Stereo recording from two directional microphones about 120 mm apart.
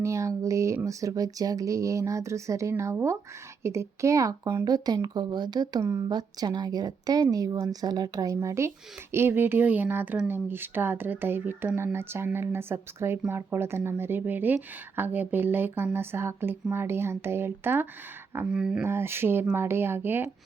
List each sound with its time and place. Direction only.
0.0 s a woman's voice: 25° right (ahead or behind)
18.4 s speech: 10° right (ahead or behind)
18.8 s speech: 20° right (ahead or behind)